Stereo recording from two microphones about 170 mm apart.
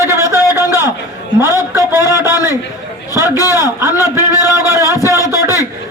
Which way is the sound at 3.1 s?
20° left (ahead or behind).